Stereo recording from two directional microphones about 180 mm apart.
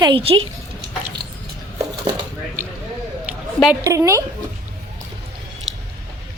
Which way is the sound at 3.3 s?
10° right (ahead or behind).